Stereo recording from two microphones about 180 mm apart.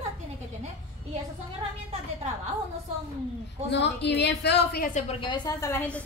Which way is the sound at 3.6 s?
70° left (ahead or behind).